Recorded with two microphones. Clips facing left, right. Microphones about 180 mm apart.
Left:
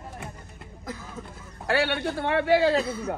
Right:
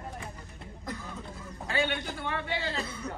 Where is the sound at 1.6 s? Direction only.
75° left (ahead or behind).